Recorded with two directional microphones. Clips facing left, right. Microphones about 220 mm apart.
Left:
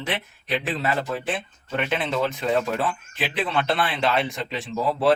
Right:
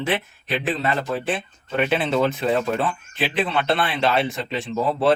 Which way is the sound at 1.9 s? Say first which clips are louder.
Right 4 dB; 30° right (ahead or behind).